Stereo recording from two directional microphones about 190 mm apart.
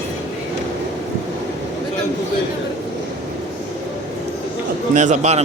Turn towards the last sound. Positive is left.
turn(degrees=-35)  # may be behind; listen again after turning